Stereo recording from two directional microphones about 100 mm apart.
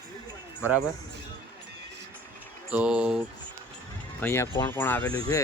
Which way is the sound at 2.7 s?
15° right (ahead or behind).